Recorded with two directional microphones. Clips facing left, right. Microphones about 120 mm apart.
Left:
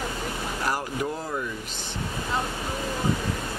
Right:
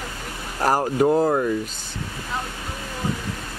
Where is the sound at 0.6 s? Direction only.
45° right (ahead or behind).